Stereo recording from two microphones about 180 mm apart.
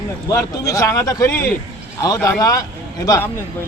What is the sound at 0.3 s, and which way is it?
Speech, 20° left (ahead or behind).